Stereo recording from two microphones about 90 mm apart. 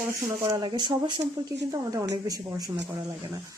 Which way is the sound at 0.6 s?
60° right (ahead or behind).